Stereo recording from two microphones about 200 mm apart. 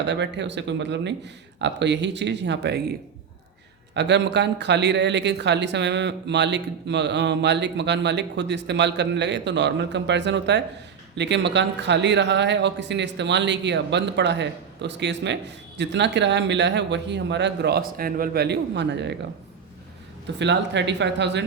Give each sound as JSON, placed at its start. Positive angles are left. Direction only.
{"t": 0.0, "sound": "speech", "side_deg": -60}
{"t": 3.9, "sound": "speech", "side_deg": -60}
{"t": 20.4, "sound": "speech", "side_deg": -60}